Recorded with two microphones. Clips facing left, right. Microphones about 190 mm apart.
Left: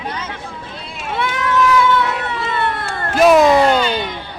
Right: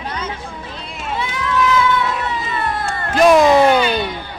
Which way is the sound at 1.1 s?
65° left (ahead or behind).